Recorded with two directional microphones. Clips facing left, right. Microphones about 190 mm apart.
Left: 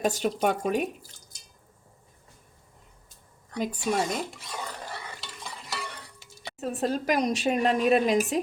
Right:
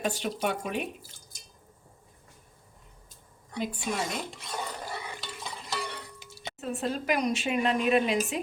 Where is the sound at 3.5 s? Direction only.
45° left (ahead or behind).